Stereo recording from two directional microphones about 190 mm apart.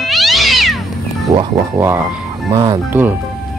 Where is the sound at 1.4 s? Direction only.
15° right (ahead or behind).